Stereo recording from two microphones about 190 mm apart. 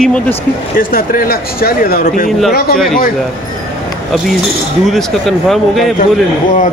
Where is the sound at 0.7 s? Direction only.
50° left (ahead or behind).